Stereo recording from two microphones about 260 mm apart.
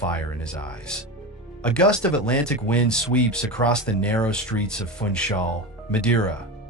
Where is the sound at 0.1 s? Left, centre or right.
Centre.